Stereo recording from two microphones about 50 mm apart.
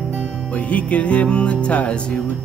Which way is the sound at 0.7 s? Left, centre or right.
Left.